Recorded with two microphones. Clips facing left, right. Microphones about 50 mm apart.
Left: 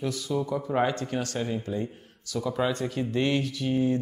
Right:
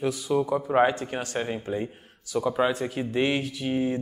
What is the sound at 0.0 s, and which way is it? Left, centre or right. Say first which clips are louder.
Speech: right 4 dB; right.